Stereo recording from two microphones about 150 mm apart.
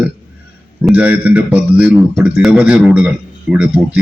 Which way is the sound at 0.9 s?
10° right (ahead or behind).